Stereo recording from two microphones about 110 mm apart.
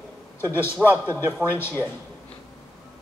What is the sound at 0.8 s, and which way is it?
Speech, 15° right (ahead or behind).